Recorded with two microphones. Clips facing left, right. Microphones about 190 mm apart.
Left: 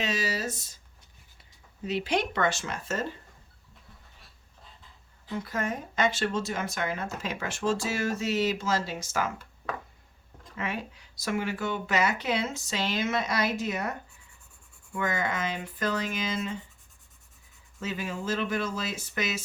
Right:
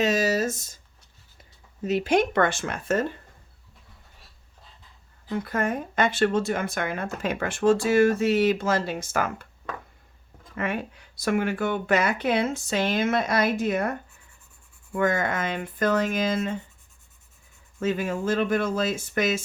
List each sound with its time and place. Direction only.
0.0 s speech: 45° right (ahead or behind)
1.8 s speech: 45° right (ahead or behind)
5.3 s speech: 55° right (ahead or behind)
10.6 s speech: 55° right (ahead or behind)
14.9 s speech: 55° right (ahead or behind)
17.7 s speech: 55° right (ahead or behind)